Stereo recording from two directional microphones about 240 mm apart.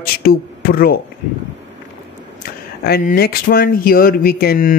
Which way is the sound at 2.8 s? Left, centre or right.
Left.